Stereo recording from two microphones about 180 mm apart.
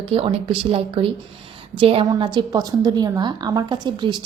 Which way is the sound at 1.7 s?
30° right (ahead or behind).